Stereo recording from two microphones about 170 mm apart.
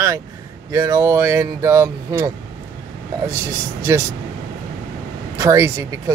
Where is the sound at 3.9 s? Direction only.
15° right (ahead or behind).